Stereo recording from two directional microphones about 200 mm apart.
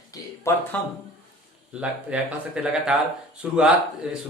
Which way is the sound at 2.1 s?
5° right (ahead or behind).